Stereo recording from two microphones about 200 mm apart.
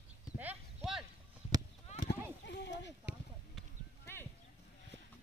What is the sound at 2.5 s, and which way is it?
Speech, 60° left (ahead or behind).